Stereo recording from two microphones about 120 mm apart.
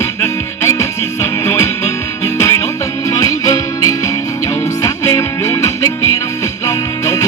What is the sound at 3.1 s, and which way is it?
Music, 30° left (ahead or behind).